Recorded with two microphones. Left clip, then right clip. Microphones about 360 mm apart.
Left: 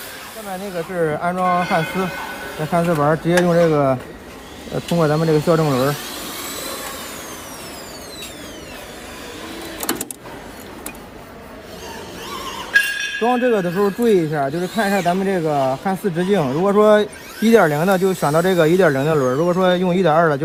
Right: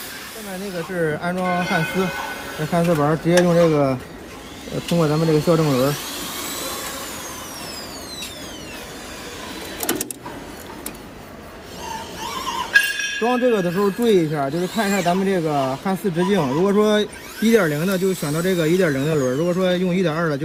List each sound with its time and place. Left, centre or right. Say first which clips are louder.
0.9 s speech: left 3 dB; centre
4.9 s speech: left 2 dB; left
12.2 s a sound: right 3 dB; centre
13.2 s speech: left 2 dB; left